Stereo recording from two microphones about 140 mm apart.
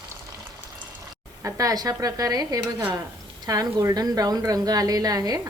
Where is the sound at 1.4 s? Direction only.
25° right (ahead or behind).